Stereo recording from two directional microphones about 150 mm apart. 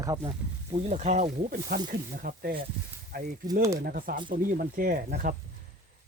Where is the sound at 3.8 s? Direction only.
75° right (ahead or behind).